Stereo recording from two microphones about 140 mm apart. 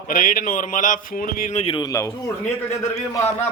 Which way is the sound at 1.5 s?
45° left (ahead or behind).